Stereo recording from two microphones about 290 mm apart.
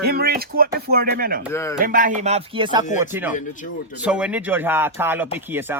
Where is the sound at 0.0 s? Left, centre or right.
Right.